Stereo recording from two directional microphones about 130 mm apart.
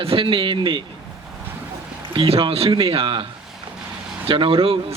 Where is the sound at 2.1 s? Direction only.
45° right (ahead or behind).